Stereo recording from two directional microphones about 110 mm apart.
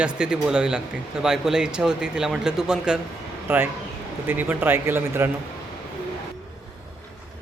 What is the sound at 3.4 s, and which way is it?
Speech, 20° right (ahead or behind).